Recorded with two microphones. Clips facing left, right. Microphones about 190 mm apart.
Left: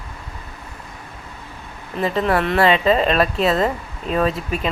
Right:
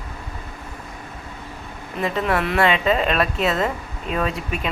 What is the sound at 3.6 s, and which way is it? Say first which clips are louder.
Speech: left 3 dB; 35° left (ahead or behind).